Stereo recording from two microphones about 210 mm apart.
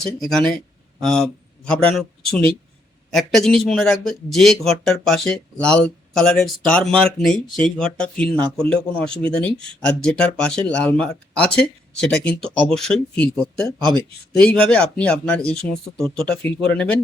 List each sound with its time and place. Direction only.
0.0 s speech: 5° left (ahead or behind)
3.1 s speech: centre (ahead or behind)